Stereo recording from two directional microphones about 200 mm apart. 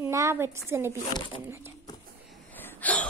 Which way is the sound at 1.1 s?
25° left (ahead or behind).